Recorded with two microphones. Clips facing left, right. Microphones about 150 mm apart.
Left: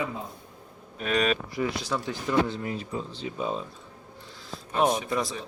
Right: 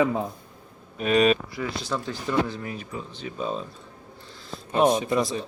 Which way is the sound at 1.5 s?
15° left (ahead or behind).